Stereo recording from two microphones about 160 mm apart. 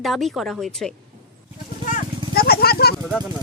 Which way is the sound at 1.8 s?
60° left (ahead or behind).